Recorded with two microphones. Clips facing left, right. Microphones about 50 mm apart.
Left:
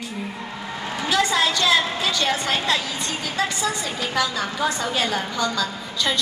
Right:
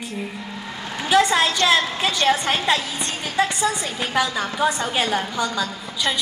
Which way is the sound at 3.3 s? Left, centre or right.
Right.